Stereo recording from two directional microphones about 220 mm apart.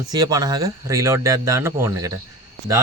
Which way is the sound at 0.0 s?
15° right (ahead or behind).